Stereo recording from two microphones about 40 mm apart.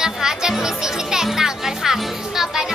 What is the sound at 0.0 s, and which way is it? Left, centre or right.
Music, centre.